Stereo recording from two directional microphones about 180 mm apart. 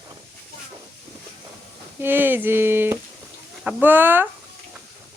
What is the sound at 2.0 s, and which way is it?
Speech, 10° right (ahead or behind).